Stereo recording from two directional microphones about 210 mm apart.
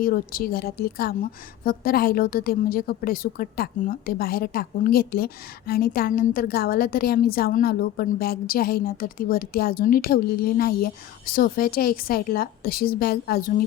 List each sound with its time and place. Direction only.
0.0 s a woman's voice: 45° left (ahead or behind)